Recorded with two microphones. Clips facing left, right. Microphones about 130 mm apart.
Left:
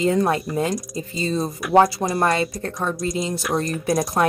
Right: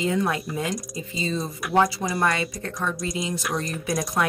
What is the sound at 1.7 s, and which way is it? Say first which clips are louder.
Speech: left 5 dB; 40° left (ahead or behind).